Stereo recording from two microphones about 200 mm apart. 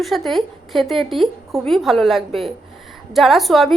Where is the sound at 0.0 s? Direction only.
Centre (ahead or behind).